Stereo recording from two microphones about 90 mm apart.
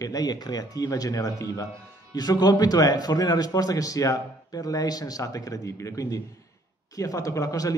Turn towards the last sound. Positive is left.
turn(degrees=40)  # may be behind; listen again after turning